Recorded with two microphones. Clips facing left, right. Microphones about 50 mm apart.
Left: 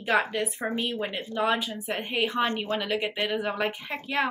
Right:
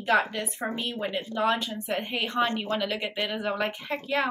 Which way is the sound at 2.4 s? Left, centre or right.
Left.